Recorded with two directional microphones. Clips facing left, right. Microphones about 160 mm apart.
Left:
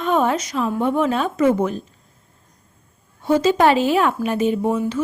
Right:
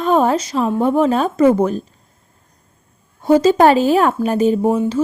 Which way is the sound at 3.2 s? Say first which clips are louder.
Right 4 dB; 40° right (ahead or behind).